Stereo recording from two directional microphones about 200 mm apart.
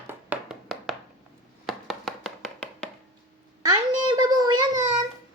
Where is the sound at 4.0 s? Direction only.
20° right (ahead or behind).